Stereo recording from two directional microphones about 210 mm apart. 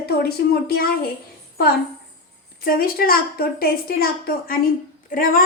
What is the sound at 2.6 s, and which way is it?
A woman's voice, 45° left (ahead or behind).